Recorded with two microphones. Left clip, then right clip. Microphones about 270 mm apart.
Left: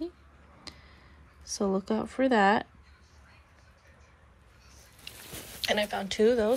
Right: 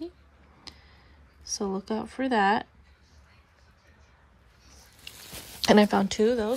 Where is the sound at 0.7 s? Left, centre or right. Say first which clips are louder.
Even; centre.